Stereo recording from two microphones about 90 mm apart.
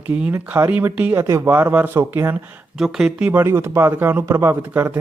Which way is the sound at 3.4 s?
25° right (ahead or behind).